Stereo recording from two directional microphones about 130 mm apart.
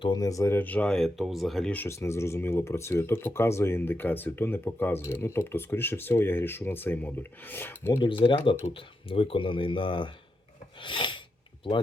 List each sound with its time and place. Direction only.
0.0 s speech: 30° left (ahead or behind); by 1.7 s centre (ahead or behind)
1.7 s speech: 15° left (ahead or behind)
8.0 s speech: 40° left (ahead or behind)